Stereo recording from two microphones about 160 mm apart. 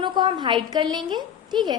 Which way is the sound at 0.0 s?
30° right (ahead or behind).